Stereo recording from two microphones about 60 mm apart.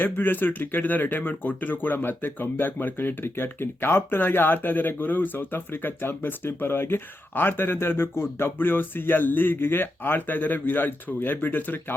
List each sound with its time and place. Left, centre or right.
0.0 s speech: left